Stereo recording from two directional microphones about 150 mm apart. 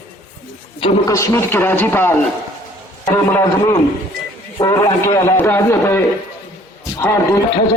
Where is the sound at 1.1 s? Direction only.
20° left (ahead or behind).